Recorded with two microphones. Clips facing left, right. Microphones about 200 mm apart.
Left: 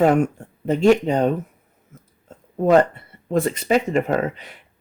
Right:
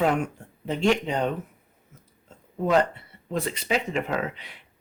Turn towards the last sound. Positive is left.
turn(degrees=45)  # may be behind; listen again after turning